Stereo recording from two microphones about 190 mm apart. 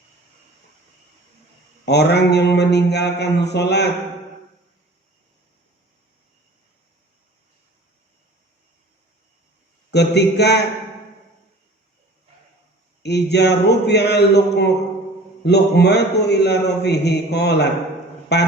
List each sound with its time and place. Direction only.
1.8 s a man's voice: 60° left (ahead or behind)
9.9 s a man's voice: 60° left (ahead or behind)
13.0 s a man's voice: 60° left (ahead or behind)